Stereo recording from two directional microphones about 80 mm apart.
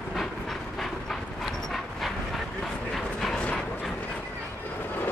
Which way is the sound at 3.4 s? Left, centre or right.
Centre.